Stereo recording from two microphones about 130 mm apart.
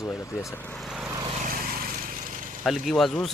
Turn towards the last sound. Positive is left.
turn(degrees=0)  # may be behind; listen again after turning